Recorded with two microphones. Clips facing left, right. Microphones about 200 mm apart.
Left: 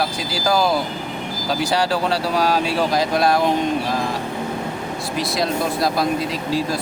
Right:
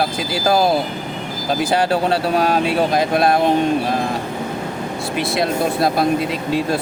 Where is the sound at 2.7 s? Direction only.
25° right (ahead or behind).